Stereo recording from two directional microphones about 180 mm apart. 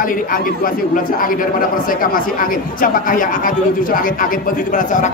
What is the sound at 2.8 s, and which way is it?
A man's voice, 50° left (ahead or behind).